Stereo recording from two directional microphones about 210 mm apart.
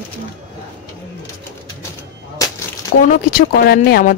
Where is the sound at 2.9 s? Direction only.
50° left (ahead or behind).